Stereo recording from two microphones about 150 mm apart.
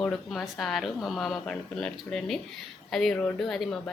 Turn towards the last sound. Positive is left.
turn(degrees=5)  # may be behind; listen again after turning